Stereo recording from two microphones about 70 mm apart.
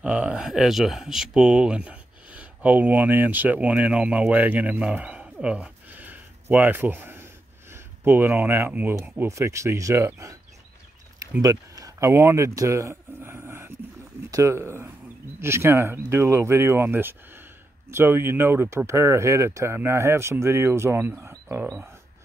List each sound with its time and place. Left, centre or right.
0.0 s speech: centre
5.9 s a sound: right
7.7 s speech: right
9.3 s speech: right
11.4 s a sound: right
12.1 s speech: right